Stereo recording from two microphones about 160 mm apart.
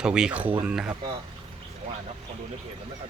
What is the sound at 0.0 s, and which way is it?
Speech, 5° right (ahead or behind).